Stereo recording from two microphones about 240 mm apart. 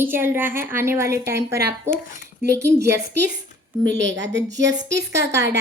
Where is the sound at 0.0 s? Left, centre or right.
Centre.